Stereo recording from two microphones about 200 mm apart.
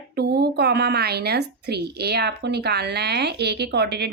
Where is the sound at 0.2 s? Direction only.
55° right (ahead or behind).